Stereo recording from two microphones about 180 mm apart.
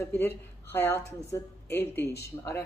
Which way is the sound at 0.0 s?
10° left (ahead or behind).